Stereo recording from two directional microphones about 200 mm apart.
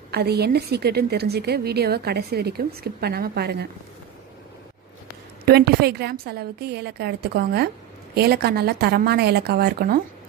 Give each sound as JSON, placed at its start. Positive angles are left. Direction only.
{"t": 0.1, "sound": "a woman's voice", "side_deg": -55}
{"t": 5.4, "sound": "a woman's voice", "side_deg": -50}